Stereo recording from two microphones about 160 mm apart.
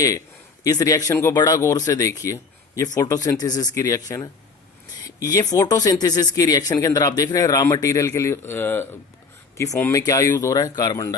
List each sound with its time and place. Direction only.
0.6 s speech: 20° left (ahead or behind)